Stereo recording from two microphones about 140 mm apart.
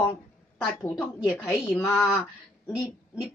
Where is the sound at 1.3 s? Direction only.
20° left (ahead or behind).